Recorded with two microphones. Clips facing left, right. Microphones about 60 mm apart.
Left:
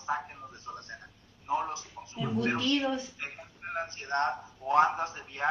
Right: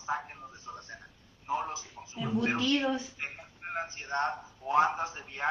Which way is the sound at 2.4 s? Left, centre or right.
Centre.